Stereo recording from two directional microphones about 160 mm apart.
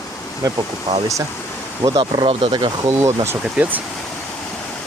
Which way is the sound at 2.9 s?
15° right (ahead or behind).